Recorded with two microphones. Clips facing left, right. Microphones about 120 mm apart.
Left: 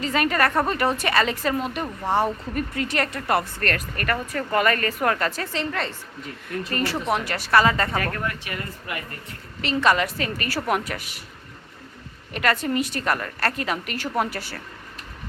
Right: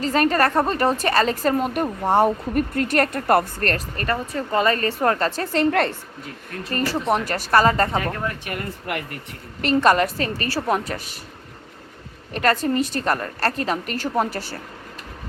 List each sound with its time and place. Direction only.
0.0 s a woman's voice: 35° right (ahead or behind)
3.7 s a woman's voice: 30° right (ahead or behind)
5.5 s speech: 60° right (ahead or behind)
6.7 s a woman's voice: 35° right (ahead or behind)
7.9 s speech: 20° right (ahead or behind)
8.4 s speech: 65° right (ahead or behind)
9.6 s a woman's voice: 45° right (ahead or behind)
12.3 s a woman's voice: 35° right (ahead or behind)